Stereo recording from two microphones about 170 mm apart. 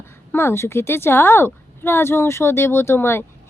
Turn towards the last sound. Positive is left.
turn(degrees=15)  # may be behind; listen again after turning